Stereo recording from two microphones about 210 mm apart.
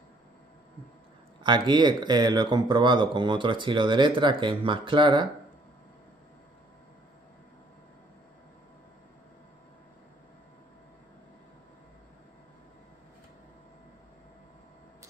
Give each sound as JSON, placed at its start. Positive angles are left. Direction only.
{"t": 1.4, "sound": "speech", "side_deg": -20}